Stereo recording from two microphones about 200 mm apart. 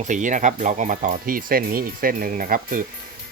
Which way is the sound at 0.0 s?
40° right (ahead or behind).